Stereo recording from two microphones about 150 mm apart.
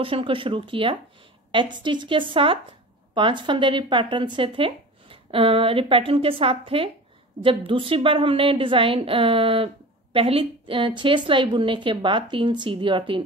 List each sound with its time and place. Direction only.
0.0 s speech: 35° right (ahead or behind)